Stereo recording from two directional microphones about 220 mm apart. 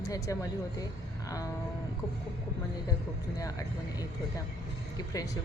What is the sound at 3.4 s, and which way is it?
Speech, 15° left (ahead or behind).